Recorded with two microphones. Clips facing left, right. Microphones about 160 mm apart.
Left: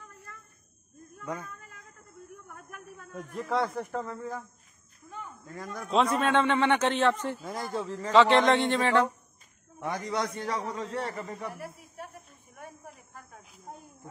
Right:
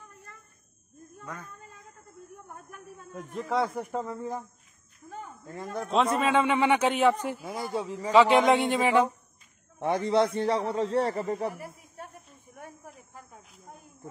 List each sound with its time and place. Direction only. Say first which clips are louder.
2.3 s a sound: right 1 dB; 30° right (ahead or behind)
3.3 s speech: right 1 dB; centre (ahead or behind)
3.9 s speech: right 2 dB; 20° right (ahead or behind)
5.1 s a sound: right 2 dB; 30° right (ahead or behind)
6.1 s a man's voice: right 1 dB; 5° right (ahead or behind)
9.8 s a man's voice: right 7 dB; 30° right (ahead or behind)
13.7 s snake: left 4 dB; 30° left (ahead or behind)